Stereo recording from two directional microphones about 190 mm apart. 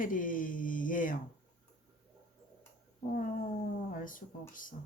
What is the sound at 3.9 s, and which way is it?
Speech, 45° left (ahead or behind).